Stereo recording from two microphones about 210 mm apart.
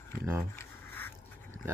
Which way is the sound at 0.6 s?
10° left (ahead or behind).